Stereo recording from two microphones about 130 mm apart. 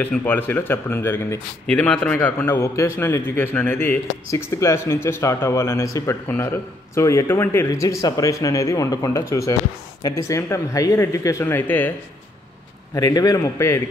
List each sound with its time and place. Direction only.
0.0 s a man's voice: 15° left (ahead or behind)
12.9 s speech: 30° left (ahead or behind)